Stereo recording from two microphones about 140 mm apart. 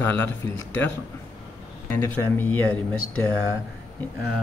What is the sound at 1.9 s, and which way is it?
Speech, 15° left (ahead or behind).